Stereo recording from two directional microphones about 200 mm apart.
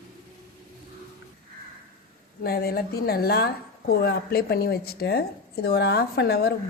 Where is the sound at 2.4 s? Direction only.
50° left (ahead or behind).